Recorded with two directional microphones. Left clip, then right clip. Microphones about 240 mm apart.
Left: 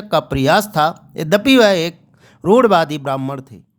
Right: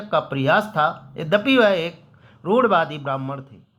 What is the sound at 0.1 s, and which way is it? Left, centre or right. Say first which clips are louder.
Speech: left 4 dB; left.